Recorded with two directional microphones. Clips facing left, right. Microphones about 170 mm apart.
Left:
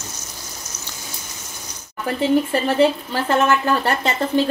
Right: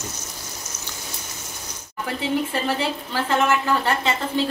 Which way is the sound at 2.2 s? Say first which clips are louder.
Left 6 dB; 40° left (ahead or behind).